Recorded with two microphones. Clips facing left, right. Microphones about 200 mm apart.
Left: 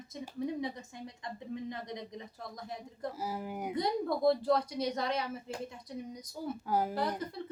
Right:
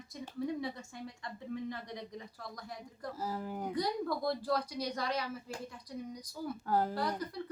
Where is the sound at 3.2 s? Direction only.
15° left (ahead or behind).